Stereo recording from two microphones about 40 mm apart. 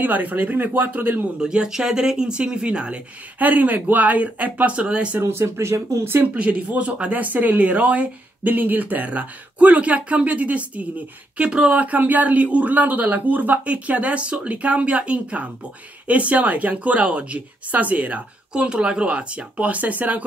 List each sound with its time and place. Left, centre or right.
0.0 s speech: right
1.4 s speech: centre
3.3 s speech: right
4.7 s speech: right
5.2 s speech: right
6.3 s speech: right
7.2 s speech: right
8.5 s speech: right
11.4 s speech: right
11.7 s speech: right
18.5 s speech: right